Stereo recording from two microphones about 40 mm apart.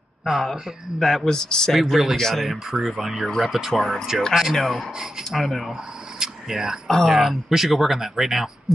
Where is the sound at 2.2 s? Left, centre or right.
Centre.